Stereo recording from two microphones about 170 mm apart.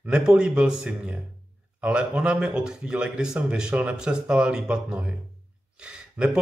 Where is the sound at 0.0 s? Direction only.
5° right (ahead or behind).